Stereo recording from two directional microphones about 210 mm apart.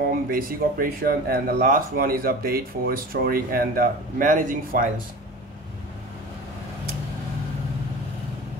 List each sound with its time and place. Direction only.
0.3 s speech: 40° right (ahead or behind)